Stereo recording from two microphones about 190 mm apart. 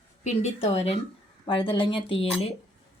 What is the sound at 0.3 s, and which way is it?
A woman's voice, 35° left (ahead or behind).